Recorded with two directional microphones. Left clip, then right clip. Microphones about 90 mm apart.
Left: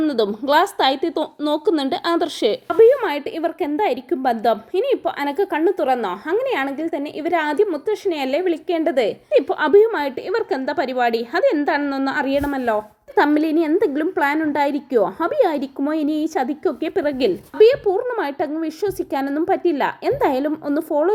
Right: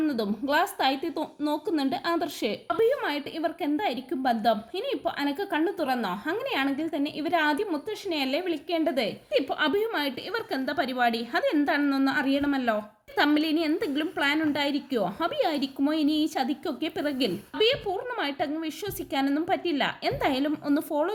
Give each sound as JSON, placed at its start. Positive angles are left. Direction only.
{"t": 0.0, "sound": "a woman's voice", "side_deg": 35}
{"t": 13.1, "sound": "a woman's voice", "side_deg": 40}
{"t": 17.6, "sound": "a woman's voice", "side_deg": 45}